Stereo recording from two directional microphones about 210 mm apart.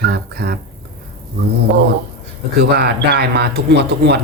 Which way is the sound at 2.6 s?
50° right (ahead or behind).